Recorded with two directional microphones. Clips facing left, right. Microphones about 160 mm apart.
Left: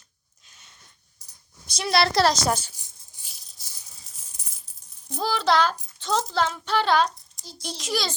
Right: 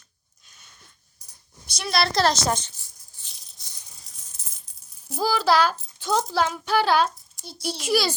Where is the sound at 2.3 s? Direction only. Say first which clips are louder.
Even; 5° left (ahead or behind).